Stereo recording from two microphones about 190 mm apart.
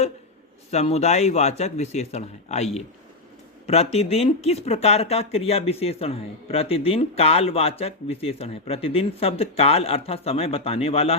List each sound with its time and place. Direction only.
0.7 s speech: 35° left (ahead or behind)
3.7 s speech: 35° left (ahead or behind)